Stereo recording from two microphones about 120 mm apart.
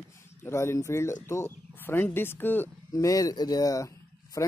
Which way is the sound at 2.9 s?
30° left (ahead or behind).